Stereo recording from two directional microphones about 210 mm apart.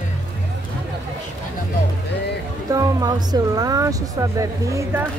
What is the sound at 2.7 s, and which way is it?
A woman's voice, 15° right (ahead or behind).